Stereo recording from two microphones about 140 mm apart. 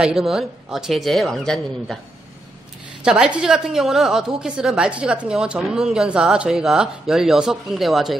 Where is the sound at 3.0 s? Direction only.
5° right (ahead or behind).